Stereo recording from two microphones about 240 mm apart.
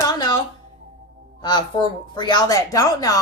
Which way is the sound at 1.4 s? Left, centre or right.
Centre.